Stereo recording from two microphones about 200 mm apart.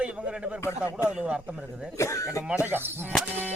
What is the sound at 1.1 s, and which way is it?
Speech, 5° right (ahead or behind).